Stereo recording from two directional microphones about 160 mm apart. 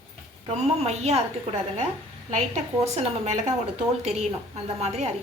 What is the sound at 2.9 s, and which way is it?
Speech, 45° right (ahead or behind).